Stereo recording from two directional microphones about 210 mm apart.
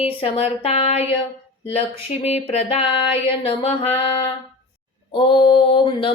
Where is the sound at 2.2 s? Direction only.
30° left (ahead or behind).